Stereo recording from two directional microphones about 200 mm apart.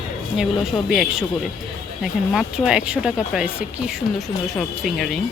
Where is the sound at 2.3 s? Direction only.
Centre (ahead or behind).